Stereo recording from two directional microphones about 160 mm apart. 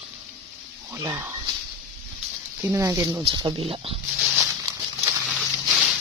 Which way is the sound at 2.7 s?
20° right (ahead or behind).